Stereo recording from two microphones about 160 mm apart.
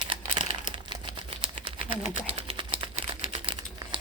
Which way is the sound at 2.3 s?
35° right (ahead or behind).